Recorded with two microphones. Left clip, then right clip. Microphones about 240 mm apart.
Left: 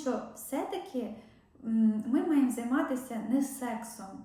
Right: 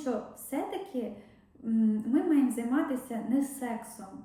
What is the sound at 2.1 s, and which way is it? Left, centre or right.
Speech, centre.